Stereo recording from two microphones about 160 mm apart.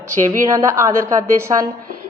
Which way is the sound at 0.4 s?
20° right (ahead or behind).